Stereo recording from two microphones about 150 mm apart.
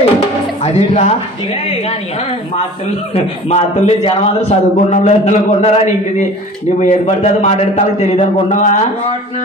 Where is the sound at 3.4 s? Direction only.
45° left (ahead or behind).